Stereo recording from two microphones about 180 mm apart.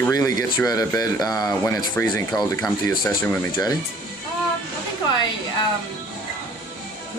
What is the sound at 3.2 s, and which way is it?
Speech, 10° left (ahead or behind).